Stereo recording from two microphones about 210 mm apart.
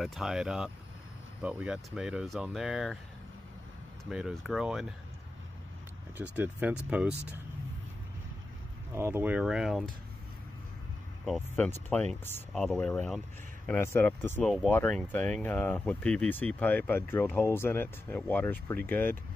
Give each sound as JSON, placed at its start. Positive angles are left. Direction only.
{"t": 0.0, "sound": "speech", "side_deg": 0}
{"t": 4.0, "sound": "speech", "side_deg": 0}
{"t": 6.3, "sound": "speech", "side_deg": -10}
{"t": 8.9, "sound": "speech", "side_deg": -10}
{"t": 11.2, "sound": "speech", "side_deg": 5}